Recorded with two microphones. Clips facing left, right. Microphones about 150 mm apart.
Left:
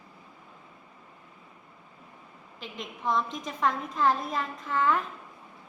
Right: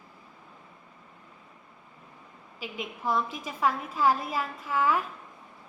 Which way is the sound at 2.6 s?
5° right (ahead or behind).